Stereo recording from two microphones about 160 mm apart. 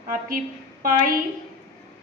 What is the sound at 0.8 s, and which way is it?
Speech, 60° right (ahead or behind).